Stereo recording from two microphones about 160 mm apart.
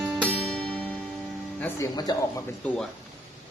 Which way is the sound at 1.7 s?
25° left (ahead or behind).